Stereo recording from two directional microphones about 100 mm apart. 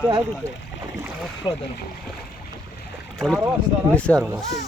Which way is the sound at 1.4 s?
45° left (ahead or behind).